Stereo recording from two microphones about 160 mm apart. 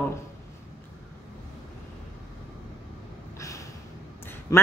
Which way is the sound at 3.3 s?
20° left (ahead or behind).